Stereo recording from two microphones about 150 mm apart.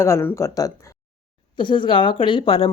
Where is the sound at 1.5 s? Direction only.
35° left (ahead or behind).